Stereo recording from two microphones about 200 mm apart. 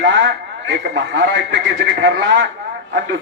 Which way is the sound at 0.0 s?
60° right (ahead or behind).